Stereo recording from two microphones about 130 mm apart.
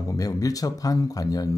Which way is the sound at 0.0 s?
25° left (ahead or behind).